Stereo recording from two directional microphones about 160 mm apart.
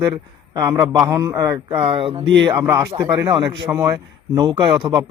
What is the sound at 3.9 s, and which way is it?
Speech, 30° right (ahead or behind).